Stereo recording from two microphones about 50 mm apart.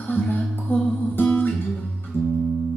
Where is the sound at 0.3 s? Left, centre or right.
Left.